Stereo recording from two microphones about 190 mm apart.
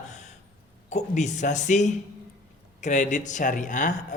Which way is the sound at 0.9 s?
40° left (ahead or behind).